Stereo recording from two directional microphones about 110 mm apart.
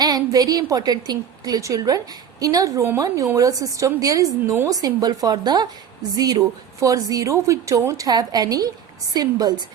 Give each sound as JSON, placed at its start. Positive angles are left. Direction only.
{"t": 0.0, "sound": "a woman's voice", "side_deg": -35}